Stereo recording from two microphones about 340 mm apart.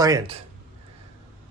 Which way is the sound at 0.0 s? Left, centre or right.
Centre.